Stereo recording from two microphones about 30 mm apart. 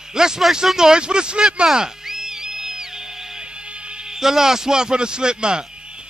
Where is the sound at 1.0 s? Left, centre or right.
Right.